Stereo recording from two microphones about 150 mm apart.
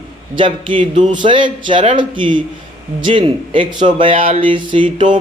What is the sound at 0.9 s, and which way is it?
Speech, 55° right (ahead or behind).